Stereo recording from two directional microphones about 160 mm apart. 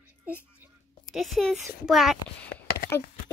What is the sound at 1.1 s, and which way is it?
A child's voice, centre (ahead or behind).